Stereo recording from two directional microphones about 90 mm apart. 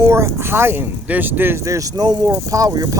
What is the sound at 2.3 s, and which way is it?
Speech, 40° right (ahead or behind).